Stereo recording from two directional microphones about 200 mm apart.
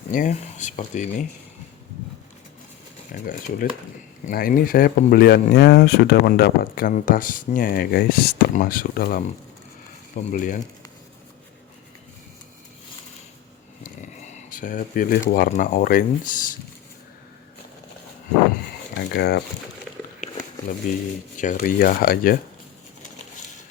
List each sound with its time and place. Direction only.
0.1 s speech: 40° left (ahead or behind)
3.1 s speech: 45° left (ahead or behind)
10.3 s speech: 40° left (ahead or behind)
13.8 s speech: 40° left (ahead or behind)
18.9 s a sound: 60° left (ahead or behind)
19.9 s a sound: 5° right (ahead or behind)
20.9 s speech: 40° left (ahead or behind)